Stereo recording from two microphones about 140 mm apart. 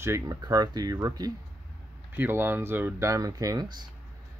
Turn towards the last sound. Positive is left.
turn(degrees=-25)  # may be behind; listen again after turning